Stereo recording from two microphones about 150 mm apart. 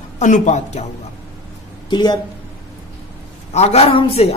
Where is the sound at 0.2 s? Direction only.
55° left (ahead or behind).